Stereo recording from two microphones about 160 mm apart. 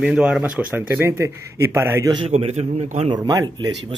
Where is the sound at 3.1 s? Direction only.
25° right (ahead or behind).